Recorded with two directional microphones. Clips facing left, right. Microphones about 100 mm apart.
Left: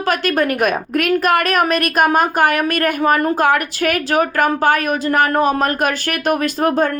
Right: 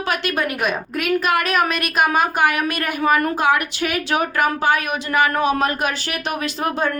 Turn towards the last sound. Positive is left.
turn(degrees=45)  # may be behind; listen again after turning